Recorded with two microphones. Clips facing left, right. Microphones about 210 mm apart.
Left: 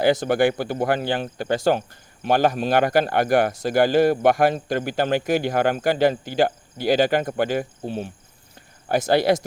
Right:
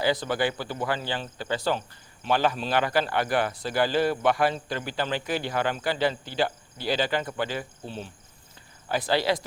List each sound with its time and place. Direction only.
0.0 s speech: 50° left (ahead or behind)